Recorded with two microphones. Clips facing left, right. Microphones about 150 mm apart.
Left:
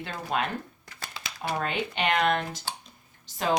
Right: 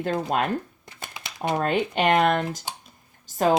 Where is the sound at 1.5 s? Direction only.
45° right (ahead or behind).